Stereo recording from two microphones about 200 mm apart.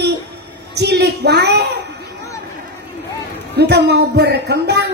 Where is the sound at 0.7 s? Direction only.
55° right (ahead or behind).